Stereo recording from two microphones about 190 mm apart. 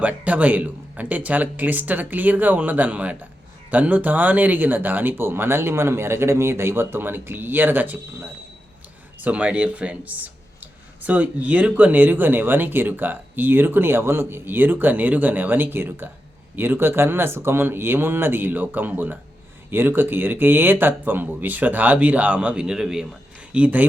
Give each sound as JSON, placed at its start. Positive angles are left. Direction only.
{"t": 0.0, "sound": "speech", "side_deg": -5}